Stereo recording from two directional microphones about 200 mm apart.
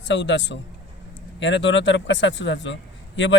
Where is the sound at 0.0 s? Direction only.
65° left (ahead or behind).